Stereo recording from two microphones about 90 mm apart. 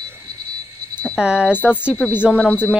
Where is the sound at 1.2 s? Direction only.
10° right (ahead or behind).